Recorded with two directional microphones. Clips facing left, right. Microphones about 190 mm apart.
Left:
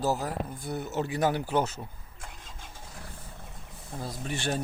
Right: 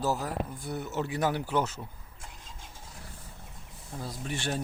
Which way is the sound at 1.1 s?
40° left (ahead or behind).